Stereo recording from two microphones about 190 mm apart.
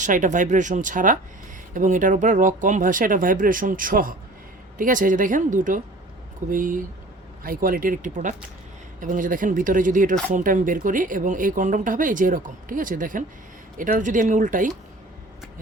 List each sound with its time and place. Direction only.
0.0 s speech: 40° right (ahead or behind)